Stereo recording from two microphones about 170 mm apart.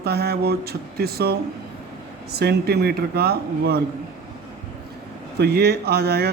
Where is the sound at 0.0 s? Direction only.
65° right (ahead or behind).